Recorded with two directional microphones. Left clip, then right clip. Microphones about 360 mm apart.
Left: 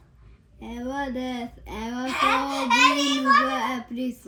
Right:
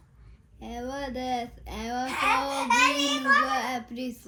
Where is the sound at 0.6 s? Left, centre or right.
Centre.